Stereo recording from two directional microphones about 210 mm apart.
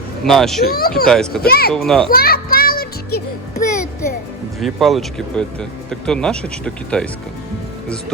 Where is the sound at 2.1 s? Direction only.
45° left (ahead or behind).